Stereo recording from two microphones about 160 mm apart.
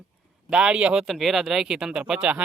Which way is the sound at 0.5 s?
5° right (ahead or behind).